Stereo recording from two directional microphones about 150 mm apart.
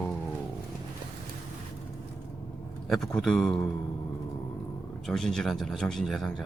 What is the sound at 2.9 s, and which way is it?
Speech, 5° left (ahead or behind).